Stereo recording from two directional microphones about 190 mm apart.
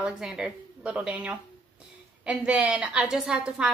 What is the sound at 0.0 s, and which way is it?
A woman's voice, 5° right (ahead or behind).